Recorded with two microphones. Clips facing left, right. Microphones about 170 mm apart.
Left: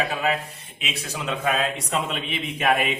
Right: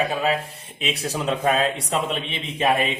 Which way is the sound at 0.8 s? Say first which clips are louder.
Right 5 dB; 35° right (ahead or behind).